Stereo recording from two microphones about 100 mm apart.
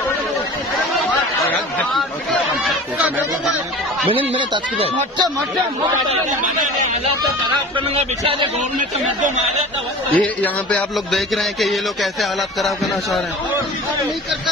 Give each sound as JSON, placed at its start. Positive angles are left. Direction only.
{"t": 2.0, "sound": "chatter", "side_deg": 0}
{"t": 4.1, "sound": "a man's voice", "side_deg": -65}
{"t": 7.9, "sound": "a man's voice", "side_deg": -90}
{"t": 10.1, "sound": "a man's voice", "side_deg": 15}
{"t": 11.1, "sound": "a sound", "side_deg": 0}